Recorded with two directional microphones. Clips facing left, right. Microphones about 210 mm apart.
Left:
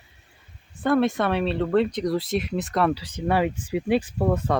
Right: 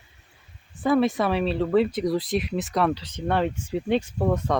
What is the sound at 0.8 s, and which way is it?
Speech, centre (ahead or behind).